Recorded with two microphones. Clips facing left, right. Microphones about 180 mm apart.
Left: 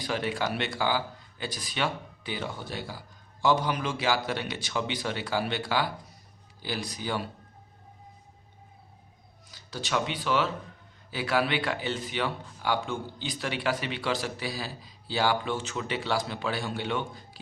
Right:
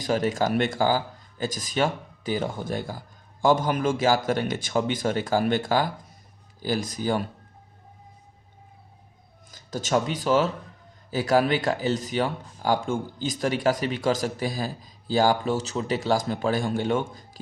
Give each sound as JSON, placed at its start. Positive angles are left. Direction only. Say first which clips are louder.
{"t": 0.0, "sound": "speech", "louder": "right 6 dB", "side_deg": -45}
{"t": 9.5, "sound": "speech", "louder": "right 7 dB", "side_deg": -45}